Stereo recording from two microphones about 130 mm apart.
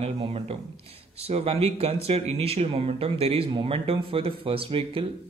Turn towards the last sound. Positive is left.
turn(degrees=-40)  # may be behind; listen again after turning